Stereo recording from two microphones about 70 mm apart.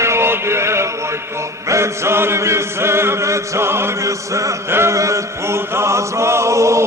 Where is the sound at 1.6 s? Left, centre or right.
Right.